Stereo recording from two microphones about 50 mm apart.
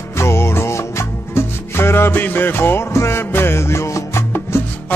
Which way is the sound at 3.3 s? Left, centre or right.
Left.